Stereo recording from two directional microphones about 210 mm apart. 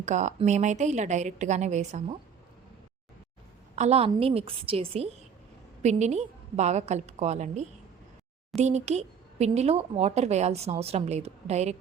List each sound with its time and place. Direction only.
0.0 s speech: 35° right (ahead or behind)
3.8 s a woman's voice: 30° right (ahead or behind)